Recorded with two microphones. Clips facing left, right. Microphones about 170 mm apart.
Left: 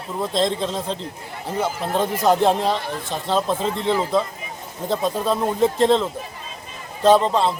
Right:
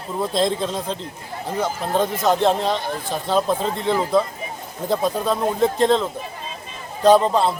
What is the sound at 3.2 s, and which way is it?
Speech, 5° right (ahead or behind).